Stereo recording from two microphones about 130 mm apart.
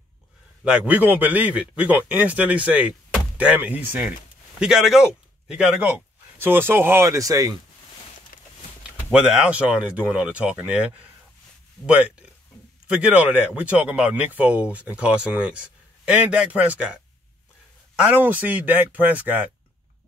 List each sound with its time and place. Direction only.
0.7 s speech: 10° right (ahead or behind); by 7.5 s 25° right (ahead or behind)
9.1 s speech: 5° right (ahead or behind)
18.0 s speech: 15° right (ahead or behind)